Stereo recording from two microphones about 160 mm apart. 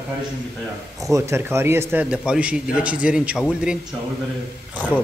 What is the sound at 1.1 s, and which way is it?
A man's voice, 15° right (ahead or behind).